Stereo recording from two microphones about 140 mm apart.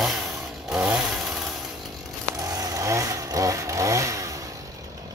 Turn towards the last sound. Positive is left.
turn(degrees=-25)  # may be behind; listen again after turning